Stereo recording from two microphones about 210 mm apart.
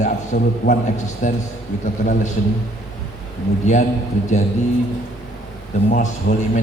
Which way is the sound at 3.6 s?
35° left (ahead or behind).